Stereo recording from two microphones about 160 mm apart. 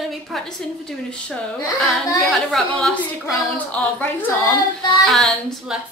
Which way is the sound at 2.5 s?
Centre (ahead or behind).